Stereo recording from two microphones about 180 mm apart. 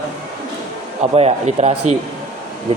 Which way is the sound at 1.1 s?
35° right (ahead or behind).